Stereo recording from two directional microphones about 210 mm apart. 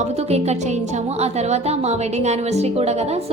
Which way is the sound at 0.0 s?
30° right (ahead or behind).